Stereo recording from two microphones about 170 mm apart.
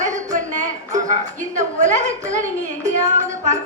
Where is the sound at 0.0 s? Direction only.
45° right (ahead or behind).